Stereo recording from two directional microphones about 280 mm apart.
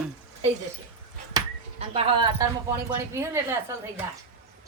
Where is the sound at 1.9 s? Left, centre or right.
Centre.